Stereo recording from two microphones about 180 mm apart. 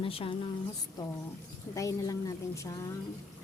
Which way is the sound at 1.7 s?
20° left (ahead or behind).